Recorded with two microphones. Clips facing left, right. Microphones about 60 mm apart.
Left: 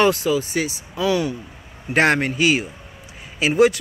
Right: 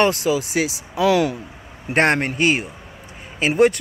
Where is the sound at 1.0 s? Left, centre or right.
Right.